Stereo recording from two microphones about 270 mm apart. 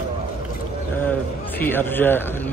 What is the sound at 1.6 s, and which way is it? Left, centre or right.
Speech, centre.